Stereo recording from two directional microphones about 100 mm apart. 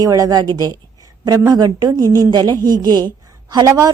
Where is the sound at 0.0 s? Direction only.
35° right (ahead or behind).